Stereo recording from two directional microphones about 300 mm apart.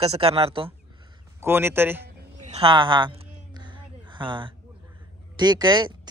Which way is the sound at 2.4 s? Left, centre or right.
Centre.